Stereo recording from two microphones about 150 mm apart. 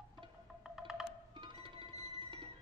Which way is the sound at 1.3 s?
35° right (ahead or behind).